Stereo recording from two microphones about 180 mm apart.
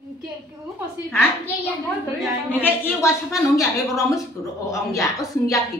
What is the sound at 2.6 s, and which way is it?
A woman's voice, 15° left (ahead or behind).